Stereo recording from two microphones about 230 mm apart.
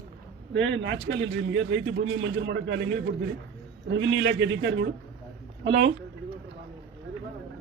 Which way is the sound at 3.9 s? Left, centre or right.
Right.